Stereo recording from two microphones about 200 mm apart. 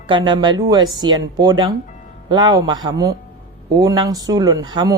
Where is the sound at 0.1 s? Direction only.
20° right (ahead or behind).